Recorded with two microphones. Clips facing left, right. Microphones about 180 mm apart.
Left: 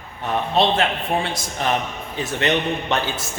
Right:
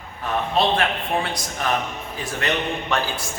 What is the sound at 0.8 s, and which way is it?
A man's voice, 25° left (ahead or behind).